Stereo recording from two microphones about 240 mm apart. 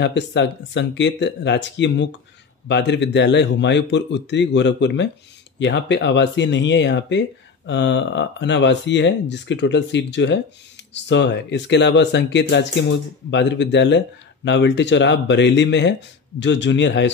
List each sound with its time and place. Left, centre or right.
0.0 s speech: left